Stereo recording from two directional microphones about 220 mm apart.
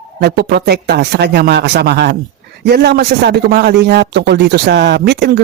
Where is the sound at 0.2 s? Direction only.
45° right (ahead or behind).